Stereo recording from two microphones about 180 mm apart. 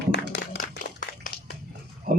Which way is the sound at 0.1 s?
70° left (ahead or behind).